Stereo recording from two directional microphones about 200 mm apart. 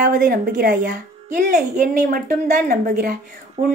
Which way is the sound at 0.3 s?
50° right (ahead or behind).